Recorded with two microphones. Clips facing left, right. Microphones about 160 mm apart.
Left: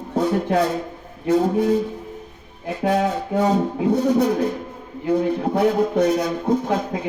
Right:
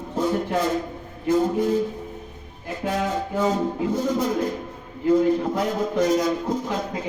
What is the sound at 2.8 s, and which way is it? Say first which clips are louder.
Music: left 5 dB; 65° left (ahead or behind).